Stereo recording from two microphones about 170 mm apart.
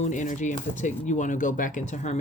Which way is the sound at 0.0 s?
45° left (ahead or behind).